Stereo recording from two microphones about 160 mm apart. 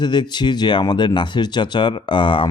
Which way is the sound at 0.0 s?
30° left (ahead or behind).